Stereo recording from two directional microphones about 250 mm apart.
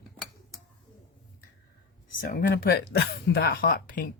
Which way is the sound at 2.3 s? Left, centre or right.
Left.